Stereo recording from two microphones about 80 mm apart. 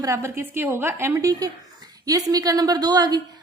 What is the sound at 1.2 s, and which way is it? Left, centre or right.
A woman's voice, right.